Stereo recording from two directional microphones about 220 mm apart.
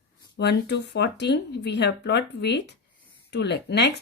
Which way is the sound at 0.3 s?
50° left (ahead or behind).